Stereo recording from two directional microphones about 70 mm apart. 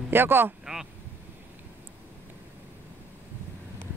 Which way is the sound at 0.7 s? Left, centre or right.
Centre.